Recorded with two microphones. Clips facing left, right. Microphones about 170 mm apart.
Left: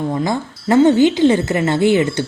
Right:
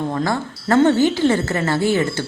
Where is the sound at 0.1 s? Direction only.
15° left (ahead or behind).